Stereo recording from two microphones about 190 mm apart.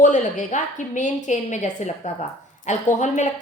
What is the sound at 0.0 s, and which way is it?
A woman's voice, 40° left (ahead or behind).